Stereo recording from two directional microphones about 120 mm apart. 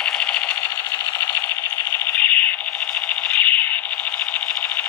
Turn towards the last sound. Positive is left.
turn(degrees=15)  # may be behind; listen again after turning